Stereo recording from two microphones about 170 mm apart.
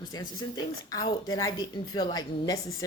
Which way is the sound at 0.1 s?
20° left (ahead or behind).